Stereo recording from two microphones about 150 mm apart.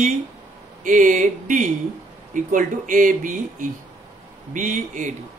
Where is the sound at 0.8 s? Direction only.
60° right (ahead or behind).